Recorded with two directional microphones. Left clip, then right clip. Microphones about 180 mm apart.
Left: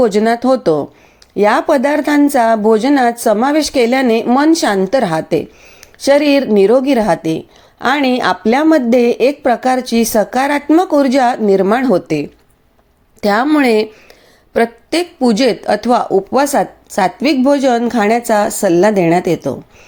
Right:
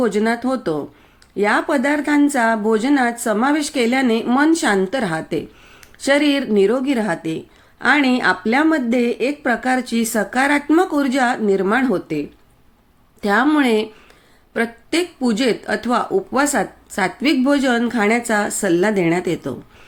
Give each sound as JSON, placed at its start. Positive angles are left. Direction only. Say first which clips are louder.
{"t": 0.0, "sound": "speech", "louder": "left 7 dB", "side_deg": 35}
{"t": 13.2, "sound": "speech", "louder": "left 4 dB", "side_deg": 35}